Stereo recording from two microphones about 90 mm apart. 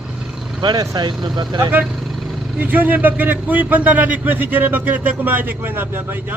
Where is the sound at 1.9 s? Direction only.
Centre (ahead or behind).